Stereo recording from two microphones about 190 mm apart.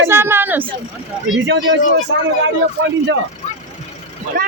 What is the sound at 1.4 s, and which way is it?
Speech, 70° right (ahead or behind).